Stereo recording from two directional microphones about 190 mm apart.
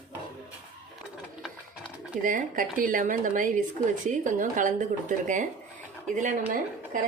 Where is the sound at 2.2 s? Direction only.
45° right (ahead or behind).